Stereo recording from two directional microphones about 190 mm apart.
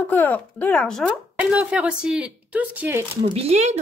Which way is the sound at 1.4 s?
5° right (ahead or behind).